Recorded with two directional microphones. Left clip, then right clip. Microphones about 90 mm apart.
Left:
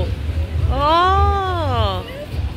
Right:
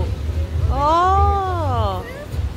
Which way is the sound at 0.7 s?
20° right (ahead or behind).